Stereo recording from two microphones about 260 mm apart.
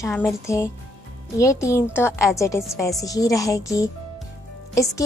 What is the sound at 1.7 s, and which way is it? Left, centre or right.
A woman's voice, centre.